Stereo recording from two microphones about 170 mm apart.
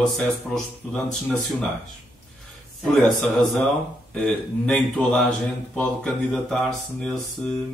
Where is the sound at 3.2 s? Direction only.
5° left (ahead or behind).